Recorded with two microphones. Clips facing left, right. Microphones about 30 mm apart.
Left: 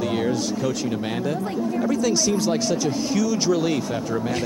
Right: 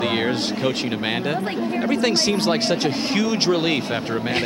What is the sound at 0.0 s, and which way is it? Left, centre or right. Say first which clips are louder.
Speech: right 2 dB; right.